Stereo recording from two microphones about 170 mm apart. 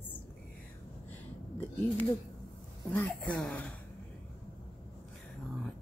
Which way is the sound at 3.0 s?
5° left (ahead or behind).